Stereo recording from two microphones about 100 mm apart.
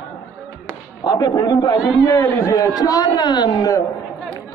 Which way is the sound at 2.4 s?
35° left (ahead or behind).